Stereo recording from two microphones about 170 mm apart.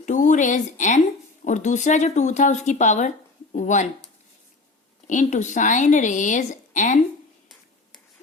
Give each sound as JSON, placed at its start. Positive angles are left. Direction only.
{"t": 0.0, "sound": "a woman's voice", "side_deg": 45}
{"t": 5.0, "sound": "a woman's voice", "side_deg": 45}